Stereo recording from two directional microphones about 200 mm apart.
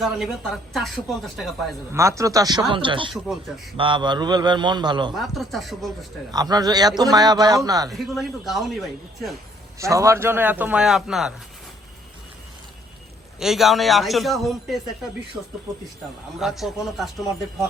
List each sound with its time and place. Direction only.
0.0 s a woman's voice: centre (ahead or behind)
1.9 s a man's voice: 15° right (ahead or behind)
3.1 s a woman's voice: centre (ahead or behind)
3.8 s a man's voice: 25° right (ahead or behind)
5.1 s a woman's voice: centre (ahead or behind)
6.3 s a man's voice: 20° right (ahead or behind)
7.9 s a woman's voice: centre (ahead or behind)
9.7 s a man's voice: 15° right (ahead or behind)
13.4 s a woman's voice: centre (ahead or behind)